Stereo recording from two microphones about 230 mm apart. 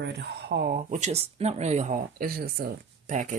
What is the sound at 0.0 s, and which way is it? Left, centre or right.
Speech, right.